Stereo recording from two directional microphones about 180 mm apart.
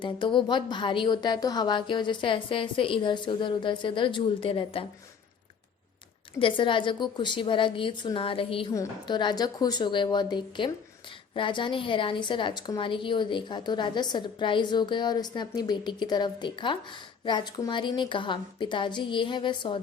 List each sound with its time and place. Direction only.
0.0 s a woman's voice: 25° left (ahead or behind)
6.4 s a woman's voice: 25° left (ahead or behind)